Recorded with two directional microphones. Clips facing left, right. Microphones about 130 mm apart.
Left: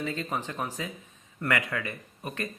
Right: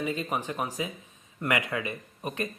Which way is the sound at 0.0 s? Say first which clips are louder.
Right 2 dB; 15° right (ahead or behind).